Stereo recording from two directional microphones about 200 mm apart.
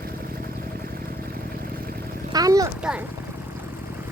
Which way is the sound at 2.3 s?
15° right (ahead or behind).